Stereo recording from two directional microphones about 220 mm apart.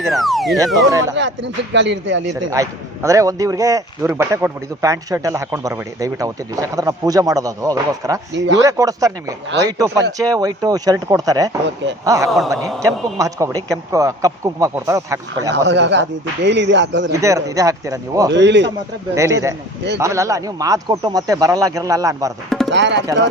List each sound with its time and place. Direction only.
0.1 s speech: centre (ahead or behind)
0.9 s speech: 15° right (ahead or behind)
1.1 s speech: 55° right (ahead or behind)
2.5 s speech: 15° right (ahead or behind)
15.5 s speech: 50° right (ahead or behind)
17.1 s speech: 15° right (ahead or behind)
18.3 s speech: 50° right (ahead or behind)
19.1 s speech: 15° right (ahead or behind)
22.4 s tabla: centre (ahead or behind)
22.7 s speech: 55° right (ahead or behind)